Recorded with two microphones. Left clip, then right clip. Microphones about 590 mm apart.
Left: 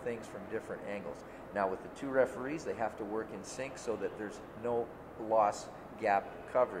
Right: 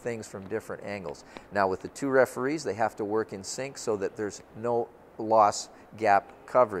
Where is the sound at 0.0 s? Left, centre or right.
Right.